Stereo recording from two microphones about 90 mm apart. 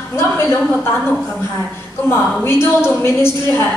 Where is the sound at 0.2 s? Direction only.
30° left (ahead or behind).